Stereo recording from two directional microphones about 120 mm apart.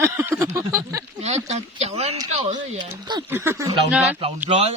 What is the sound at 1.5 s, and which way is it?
Speech, 65° right (ahead or behind).